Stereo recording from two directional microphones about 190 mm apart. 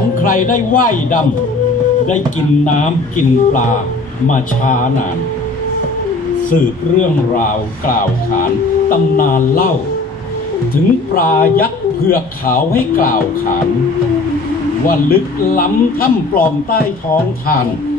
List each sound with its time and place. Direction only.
0.2 s a man's voice: 45° left (ahead or behind)
2.6 s a man's voice: 40° left (ahead or behind)
6.5 s a man's voice: 45° left (ahead or behind)
10.7 s a man's voice: 50° left (ahead or behind)
14.9 s a man's voice: 50° left (ahead or behind)